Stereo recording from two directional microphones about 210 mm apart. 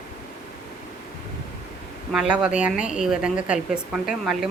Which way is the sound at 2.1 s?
5° right (ahead or behind).